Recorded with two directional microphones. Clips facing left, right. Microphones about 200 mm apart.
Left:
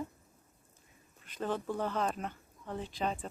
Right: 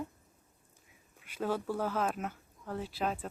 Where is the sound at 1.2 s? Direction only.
10° right (ahead or behind).